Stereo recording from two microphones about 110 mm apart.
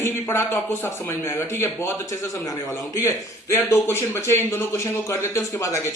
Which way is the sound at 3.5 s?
20° left (ahead or behind).